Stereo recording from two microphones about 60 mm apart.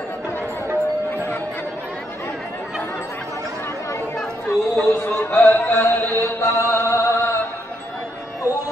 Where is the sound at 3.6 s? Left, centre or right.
Left.